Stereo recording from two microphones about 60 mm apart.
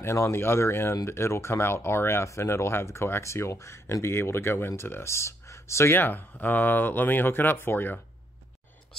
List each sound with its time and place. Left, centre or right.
0.0 s speech: left
5.9 s speech: left